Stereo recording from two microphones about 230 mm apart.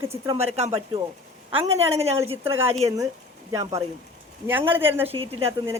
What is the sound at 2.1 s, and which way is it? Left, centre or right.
Speech, right.